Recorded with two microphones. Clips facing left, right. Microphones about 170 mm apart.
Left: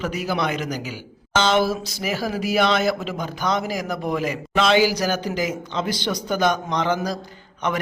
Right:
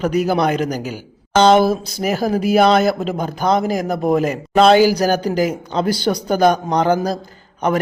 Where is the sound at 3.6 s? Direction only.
50° right (ahead or behind).